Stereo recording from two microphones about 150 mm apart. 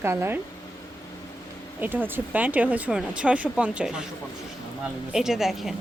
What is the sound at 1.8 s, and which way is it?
A woman's voice, 15° right (ahead or behind).